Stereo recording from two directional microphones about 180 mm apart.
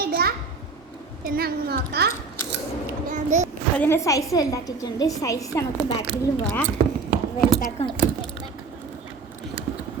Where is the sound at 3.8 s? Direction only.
15° left (ahead or behind).